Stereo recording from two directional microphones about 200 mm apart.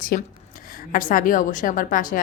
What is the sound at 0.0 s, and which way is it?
A woman's voice, 45° left (ahead or behind).